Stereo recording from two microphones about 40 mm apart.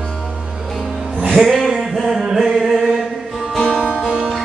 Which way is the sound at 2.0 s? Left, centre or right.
Centre.